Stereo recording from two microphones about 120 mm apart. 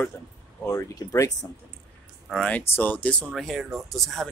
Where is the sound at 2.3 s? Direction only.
5° left (ahead or behind).